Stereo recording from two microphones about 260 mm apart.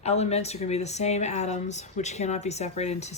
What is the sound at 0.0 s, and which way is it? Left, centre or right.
Speech, left.